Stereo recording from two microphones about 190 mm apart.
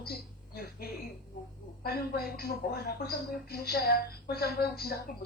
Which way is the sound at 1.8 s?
55° left (ahead or behind).